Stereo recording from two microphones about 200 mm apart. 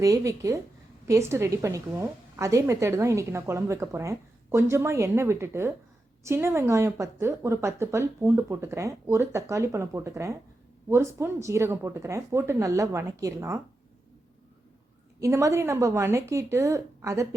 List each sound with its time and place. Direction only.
0.0 s a woman's voice: 15° right (ahead or behind)
15.2 s a woman's voice: 15° right (ahead or behind)